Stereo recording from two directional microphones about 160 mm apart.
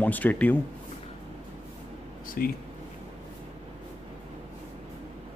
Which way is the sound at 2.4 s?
65° left (ahead or behind).